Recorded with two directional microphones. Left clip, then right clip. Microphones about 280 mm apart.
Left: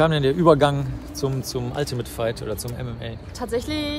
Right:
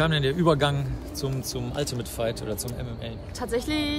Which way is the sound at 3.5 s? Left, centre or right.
Centre.